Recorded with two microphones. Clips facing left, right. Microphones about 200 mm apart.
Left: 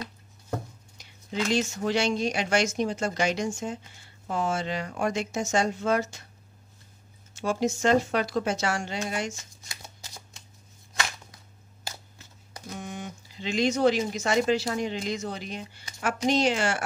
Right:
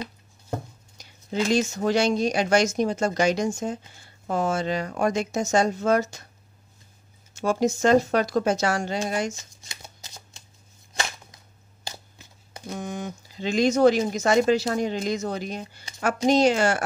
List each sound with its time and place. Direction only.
0.9 s speech: 40° right (ahead or behind)
7.3 s speech: 40° right (ahead or behind)
12.2 s a sound: 25° right (ahead or behind)
12.7 s speech: 45° right (ahead or behind)